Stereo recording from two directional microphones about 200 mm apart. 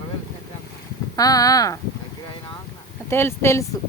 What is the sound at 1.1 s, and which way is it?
Speech, 20° left (ahead or behind).